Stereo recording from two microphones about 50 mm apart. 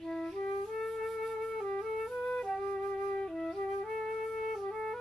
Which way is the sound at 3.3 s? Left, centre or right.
Centre.